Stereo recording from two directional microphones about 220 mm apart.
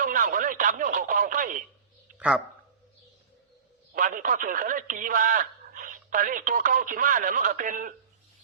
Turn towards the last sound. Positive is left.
turn(degrees=-40)  # may be behind; listen again after turning